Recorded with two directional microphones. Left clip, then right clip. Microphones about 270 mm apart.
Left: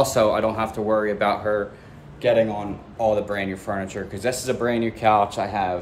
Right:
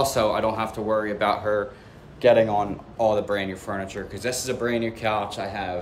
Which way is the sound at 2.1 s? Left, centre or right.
Centre.